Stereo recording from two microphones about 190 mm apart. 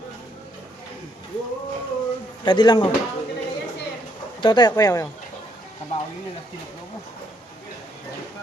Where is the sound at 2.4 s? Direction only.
20° left (ahead or behind).